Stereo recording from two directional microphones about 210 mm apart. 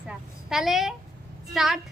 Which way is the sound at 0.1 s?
5° right (ahead or behind).